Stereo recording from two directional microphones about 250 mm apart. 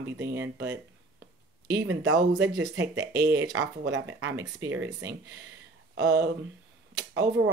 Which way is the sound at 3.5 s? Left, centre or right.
Right.